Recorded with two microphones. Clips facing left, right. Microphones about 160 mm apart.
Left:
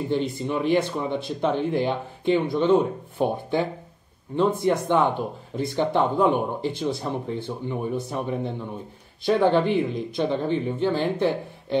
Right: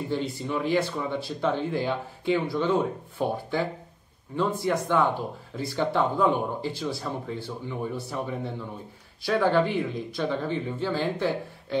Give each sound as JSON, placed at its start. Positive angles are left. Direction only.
{"t": 0.1, "sound": "speech", "side_deg": 20}